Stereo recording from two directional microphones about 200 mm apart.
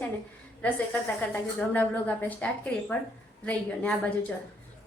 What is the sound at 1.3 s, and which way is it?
A woman's voice, 10° left (ahead or behind).